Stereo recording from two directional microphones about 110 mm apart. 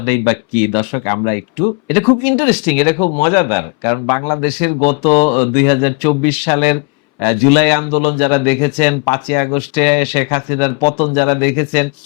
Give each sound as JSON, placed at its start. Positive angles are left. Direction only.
{"t": 0.0, "sound": "speech", "side_deg": 15}
{"t": 0.7, "sound": "speech", "side_deg": 25}
{"t": 1.9, "sound": "speech", "side_deg": 15}
{"t": 4.4, "sound": "speech", "side_deg": 10}